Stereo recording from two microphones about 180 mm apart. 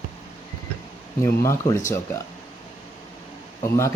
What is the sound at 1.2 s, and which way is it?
Speech, 15° left (ahead or behind).